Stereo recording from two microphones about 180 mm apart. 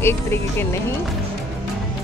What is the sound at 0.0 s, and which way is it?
Speech, 15° left (ahead or behind).